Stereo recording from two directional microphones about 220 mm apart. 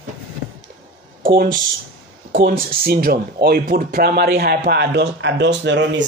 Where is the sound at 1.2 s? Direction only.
40° right (ahead or behind).